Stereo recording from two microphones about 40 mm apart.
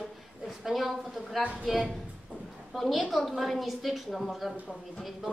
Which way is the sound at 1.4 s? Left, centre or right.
Right.